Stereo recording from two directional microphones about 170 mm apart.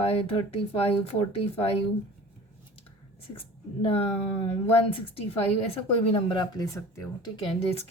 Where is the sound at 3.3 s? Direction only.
35° left (ahead or behind).